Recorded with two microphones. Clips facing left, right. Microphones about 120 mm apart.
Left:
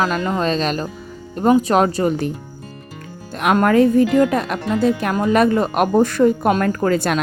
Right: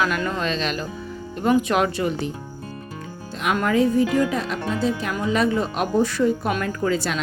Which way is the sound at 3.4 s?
55° left (ahead or behind).